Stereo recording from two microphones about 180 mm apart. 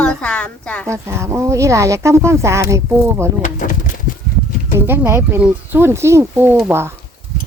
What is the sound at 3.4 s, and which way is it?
Pigeon, 45° left (ahead or behind).